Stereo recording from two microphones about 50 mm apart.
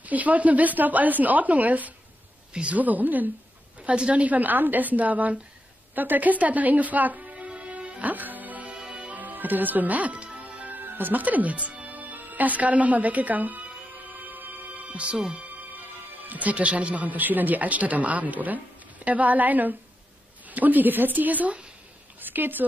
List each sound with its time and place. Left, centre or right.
0.0 s speech: right
3.8 s speech: right
8.1 s music: right
8.7 s music: centre
9.1 s music: right
10.7 s music: right
15.0 s speech: centre
16.3 s speech: right